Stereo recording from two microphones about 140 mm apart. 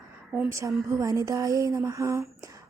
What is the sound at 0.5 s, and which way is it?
A woman's voice, 20° right (ahead or behind).